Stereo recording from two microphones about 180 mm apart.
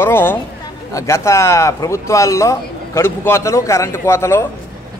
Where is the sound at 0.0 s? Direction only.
10° left (ahead or behind).